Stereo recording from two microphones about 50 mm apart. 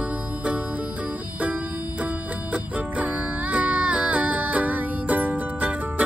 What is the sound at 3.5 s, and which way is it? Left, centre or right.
Music, right.